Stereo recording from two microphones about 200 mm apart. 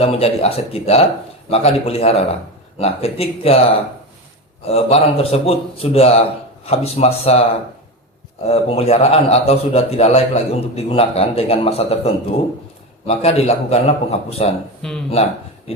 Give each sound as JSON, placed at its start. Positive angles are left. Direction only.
{"t": 0.0, "sound": "a man's voice", "side_deg": 30}
{"t": 4.6, "sound": "a man's voice", "side_deg": 30}
{"t": 8.4, "sound": "a man's voice", "side_deg": 30}
{"t": 14.8, "sound": "speech", "side_deg": 5}